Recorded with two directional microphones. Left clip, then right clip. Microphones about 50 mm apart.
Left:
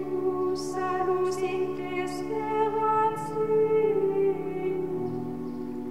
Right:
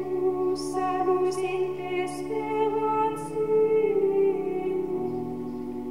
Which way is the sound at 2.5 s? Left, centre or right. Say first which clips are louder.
Left 1 dB; left.